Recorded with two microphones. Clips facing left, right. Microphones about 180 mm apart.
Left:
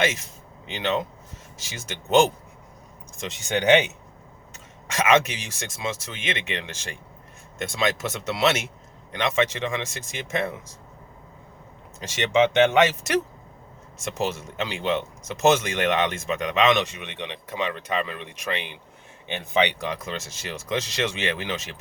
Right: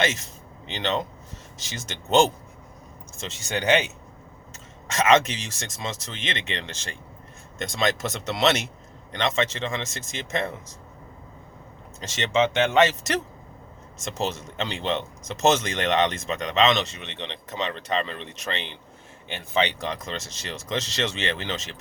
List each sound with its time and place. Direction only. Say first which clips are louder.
0.7 s speech: left 1 dB; 5° left (ahead or behind)
11.9 s speech: left 2 dB; 10° left (ahead or behind)